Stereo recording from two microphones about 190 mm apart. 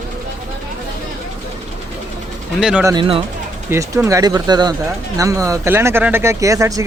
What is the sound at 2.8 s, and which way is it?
Speech, 25° right (ahead or behind).